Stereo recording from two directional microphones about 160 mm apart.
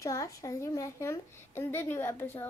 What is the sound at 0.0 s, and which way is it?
A child's voice, 20° left (ahead or behind).